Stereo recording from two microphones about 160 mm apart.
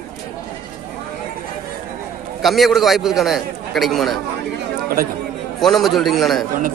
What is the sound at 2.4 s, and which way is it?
A man's voice, centre (ahead or behind).